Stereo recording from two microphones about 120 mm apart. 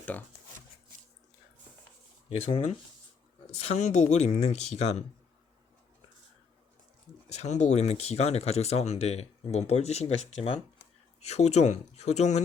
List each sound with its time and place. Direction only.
2.3 s speech: 55° left (ahead or behind)
7.3 s speech: 70° left (ahead or behind)